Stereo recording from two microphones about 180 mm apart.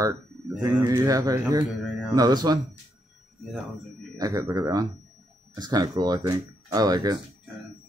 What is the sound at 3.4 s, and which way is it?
Speech, centre (ahead or behind).